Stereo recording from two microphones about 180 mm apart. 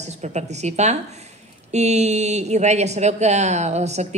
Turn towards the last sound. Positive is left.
turn(degrees=-40)  # may be behind; listen again after turning